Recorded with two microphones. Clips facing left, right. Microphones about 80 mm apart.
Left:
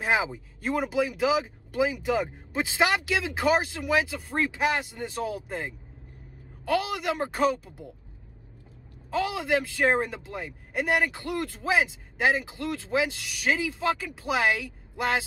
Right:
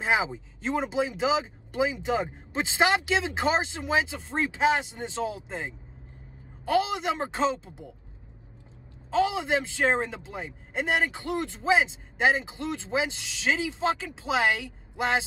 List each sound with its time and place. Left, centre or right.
0.0 s speech: right
9.1 s speech: right